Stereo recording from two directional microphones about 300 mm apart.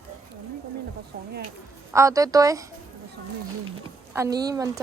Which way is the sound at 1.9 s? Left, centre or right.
Centre.